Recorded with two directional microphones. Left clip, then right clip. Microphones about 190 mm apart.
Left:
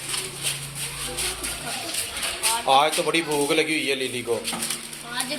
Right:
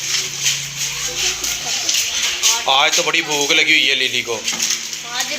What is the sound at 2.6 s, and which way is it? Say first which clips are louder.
A man's voice: right 2 dB; centre (ahead or behind).